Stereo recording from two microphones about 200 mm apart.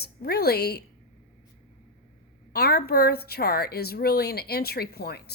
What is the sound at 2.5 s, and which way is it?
A woman's voice, 50° left (ahead or behind).